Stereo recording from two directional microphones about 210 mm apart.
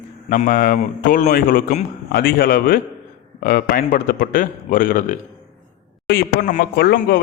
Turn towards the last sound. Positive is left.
turn(degrees=50)  # may be behind; listen again after turning